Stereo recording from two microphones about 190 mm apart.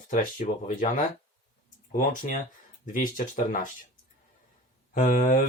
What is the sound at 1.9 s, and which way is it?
Speech, 45° left (ahead or behind).